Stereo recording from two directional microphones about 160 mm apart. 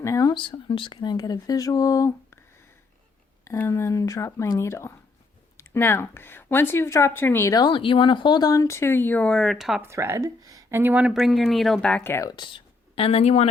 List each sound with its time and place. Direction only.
0.0 s speech: 20° left (ahead or behind)
3.4 s speech: 15° left (ahead or behind); by 9.8 s centre (ahead or behind)
9.8 s speech: 15° right (ahead or behind); by 13.5 s 40° left (ahead or behind)